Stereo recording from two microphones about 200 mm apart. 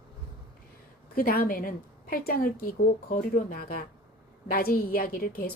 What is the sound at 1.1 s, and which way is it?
A woman's voice, 50° left (ahead or behind).